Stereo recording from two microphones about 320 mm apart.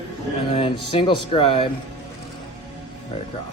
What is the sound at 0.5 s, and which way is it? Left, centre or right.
Speech, centre.